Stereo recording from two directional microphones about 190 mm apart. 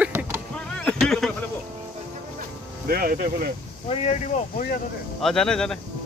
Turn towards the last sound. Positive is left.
turn(degrees=5)  # may be behind; listen again after turning